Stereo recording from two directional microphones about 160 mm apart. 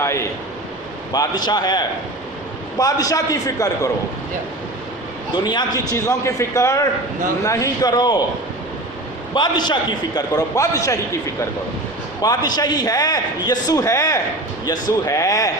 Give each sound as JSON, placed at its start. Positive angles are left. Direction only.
{"t": 0.0, "sound": "a man's voice", "side_deg": 15}
{"t": 5.5, "sound": "a man's voice", "side_deg": 25}
{"t": 9.3, "sound": "a man's voice", "side_deg": 25}